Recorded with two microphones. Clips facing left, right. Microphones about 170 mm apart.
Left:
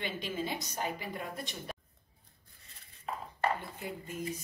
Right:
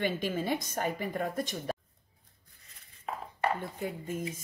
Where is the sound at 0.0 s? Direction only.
50° right (ahead or behind).